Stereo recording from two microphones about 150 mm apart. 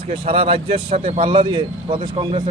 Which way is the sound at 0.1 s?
40° right (ahead or behind).